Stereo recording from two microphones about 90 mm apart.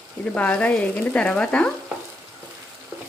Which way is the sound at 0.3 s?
15° left (ahead or behind).